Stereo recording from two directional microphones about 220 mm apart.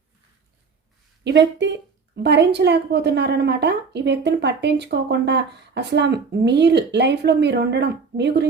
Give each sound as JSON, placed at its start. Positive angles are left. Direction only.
{"t": 1.2, "sound": "a woman's voice", "side_deg": -55}